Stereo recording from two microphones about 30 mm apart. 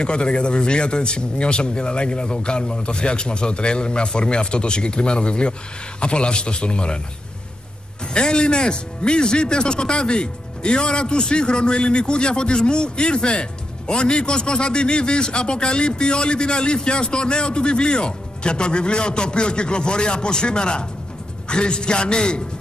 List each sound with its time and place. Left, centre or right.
0.0 s speech: left
8.1 s speech: left